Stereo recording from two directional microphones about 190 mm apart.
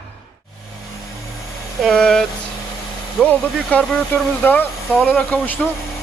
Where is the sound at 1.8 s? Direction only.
5° left (ahead or behind).